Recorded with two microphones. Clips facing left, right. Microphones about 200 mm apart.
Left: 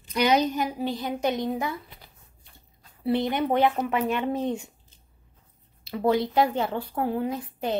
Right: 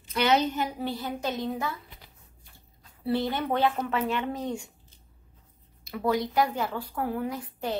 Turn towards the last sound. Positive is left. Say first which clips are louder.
# left 3 dB
turn(degrees=20)  # may be behind; listen again after turning